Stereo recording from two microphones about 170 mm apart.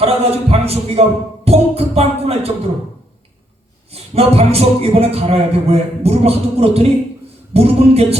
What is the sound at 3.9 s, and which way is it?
Speech, 35° right (ahead or behind).